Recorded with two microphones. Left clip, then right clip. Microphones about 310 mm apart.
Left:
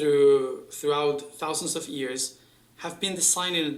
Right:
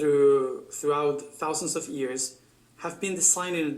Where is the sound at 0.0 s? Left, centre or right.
Centre.